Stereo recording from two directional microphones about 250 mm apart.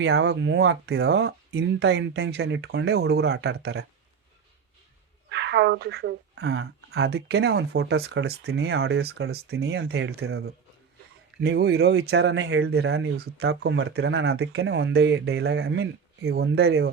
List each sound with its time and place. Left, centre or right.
0.0 s speech: right
5.3 s speech: right
11.3 s speech: right